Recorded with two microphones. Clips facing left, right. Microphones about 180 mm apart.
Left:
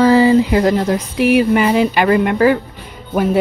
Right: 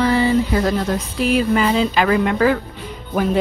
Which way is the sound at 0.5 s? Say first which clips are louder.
Left 5 dB; 15° left (ahead or behind).